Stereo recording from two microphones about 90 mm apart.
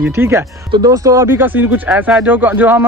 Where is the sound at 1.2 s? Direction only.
20° right (ahead or behind).